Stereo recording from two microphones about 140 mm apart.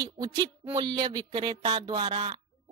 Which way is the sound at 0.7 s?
30° right (ahead or behind).